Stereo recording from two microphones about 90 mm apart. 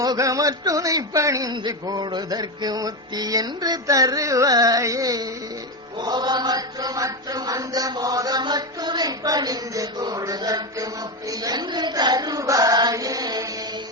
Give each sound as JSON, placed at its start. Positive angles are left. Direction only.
{"t": 0.0, "sound": "a man's voice", "side_deg": -40}
{"t": 6.0, "sound": "a man's voice", "side_deg": -50}
{"t": 11.3, "sound": "a sound", "side_deg": -45}